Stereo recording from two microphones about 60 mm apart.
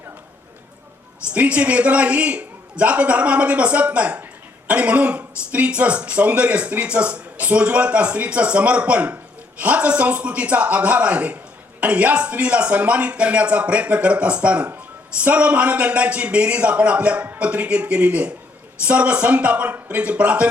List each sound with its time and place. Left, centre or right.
1.3 s speech: right